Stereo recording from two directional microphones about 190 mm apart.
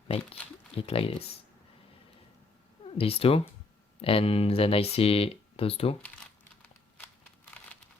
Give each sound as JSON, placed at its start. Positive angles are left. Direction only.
{"t": 0.8, "sound": "speech", "side_deg": 30}
{"t": 3.0, "sound": "speech", "side_deg": 30}
{"t": 7.6, "sound": "a sound", "side_deg": 5}